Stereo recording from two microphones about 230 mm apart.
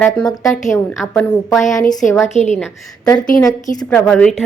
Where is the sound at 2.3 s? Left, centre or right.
Left.